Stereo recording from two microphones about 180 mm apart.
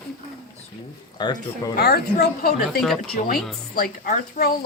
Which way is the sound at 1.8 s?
60° left (ahead or behind).